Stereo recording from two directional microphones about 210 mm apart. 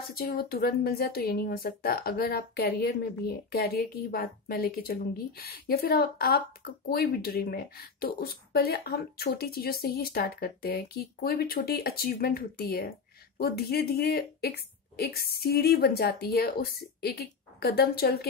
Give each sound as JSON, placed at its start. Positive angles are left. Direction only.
{"t": 0.1, "sound": "a woman's voice", "side_deg": 45}